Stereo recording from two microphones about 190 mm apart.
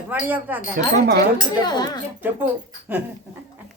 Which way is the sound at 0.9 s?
55° right (ahead or behind).